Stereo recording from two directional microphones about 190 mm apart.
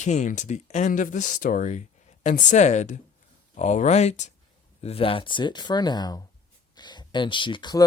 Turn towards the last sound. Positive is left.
turn(degrees=20)  # may be behind; listen again after turning